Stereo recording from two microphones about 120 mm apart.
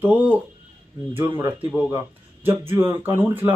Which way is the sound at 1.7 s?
15° right (ahead or behind).